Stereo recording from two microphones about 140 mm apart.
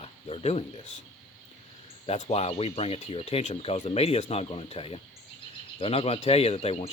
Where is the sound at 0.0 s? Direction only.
45° left (ahead or behind).